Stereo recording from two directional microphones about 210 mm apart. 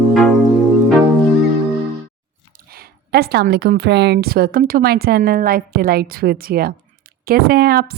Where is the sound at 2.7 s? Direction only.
45° right (ahead or behind).